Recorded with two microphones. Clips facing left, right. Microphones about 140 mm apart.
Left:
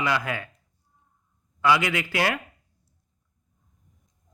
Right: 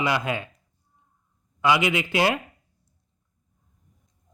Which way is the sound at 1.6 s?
20° right (ahead or behind).